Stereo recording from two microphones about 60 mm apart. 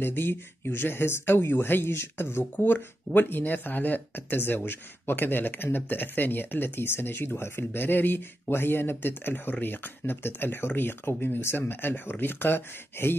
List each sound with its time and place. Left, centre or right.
0.0 s speech: left
2.5 s speech: left